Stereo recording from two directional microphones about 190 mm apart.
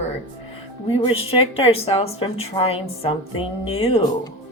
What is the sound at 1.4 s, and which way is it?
A woman's voice, 30° left (ahead or behind).